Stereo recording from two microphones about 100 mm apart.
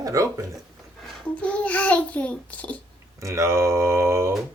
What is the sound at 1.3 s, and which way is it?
A child's voice, 10° left (ahead or behind).